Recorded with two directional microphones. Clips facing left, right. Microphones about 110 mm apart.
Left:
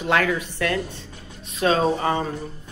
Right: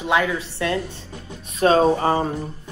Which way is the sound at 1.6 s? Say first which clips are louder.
Right 4 dB; 35° right (ahead or behind).